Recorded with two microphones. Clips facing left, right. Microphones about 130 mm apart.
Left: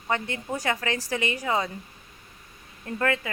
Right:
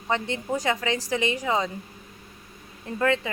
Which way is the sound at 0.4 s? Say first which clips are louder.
Right 3 dB; 15° right (ahead or behind).